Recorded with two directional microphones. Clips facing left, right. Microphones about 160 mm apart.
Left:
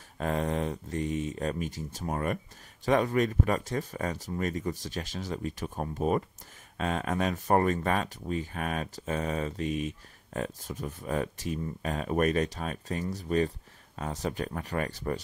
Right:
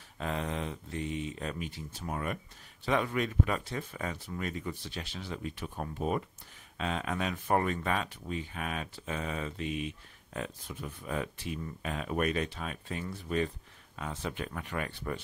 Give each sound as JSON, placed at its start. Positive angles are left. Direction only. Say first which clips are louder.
{"t": 0.2, "sound": "speech", "louder": "left 5 dB", "side_deg": 45}